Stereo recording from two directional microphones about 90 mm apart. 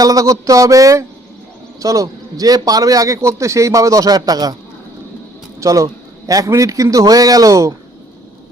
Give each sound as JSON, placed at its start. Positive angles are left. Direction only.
{"t": 0.0, "sound": "a man's voice", "side_deg": -40}
{"t": 5.5, "sound": "a man's voice", "side_deg": -35}